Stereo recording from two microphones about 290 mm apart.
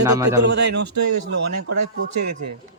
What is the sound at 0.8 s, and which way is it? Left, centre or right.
A man's voice, right.